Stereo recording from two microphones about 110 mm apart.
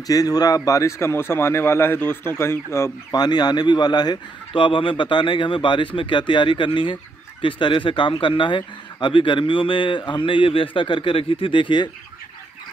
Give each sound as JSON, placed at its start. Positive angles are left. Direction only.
{"t": 0.0, "sound": "speech", "side_deg": 35}
{"t": 3.1, "sound": "a man's voice", "side_deg": 40}